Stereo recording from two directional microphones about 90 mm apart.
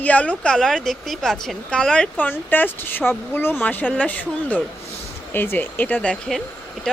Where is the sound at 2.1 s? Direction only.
20° left (ahead or behind).